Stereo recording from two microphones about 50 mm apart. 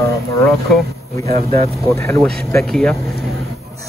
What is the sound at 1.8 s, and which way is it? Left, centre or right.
Speech, left.